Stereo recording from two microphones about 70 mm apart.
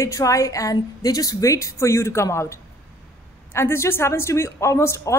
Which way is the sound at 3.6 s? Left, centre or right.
Left.